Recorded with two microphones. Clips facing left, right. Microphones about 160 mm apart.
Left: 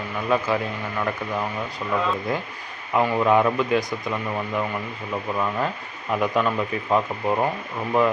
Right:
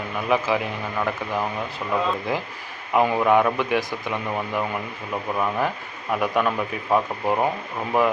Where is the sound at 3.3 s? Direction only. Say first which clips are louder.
Even; centre (ahead or behind).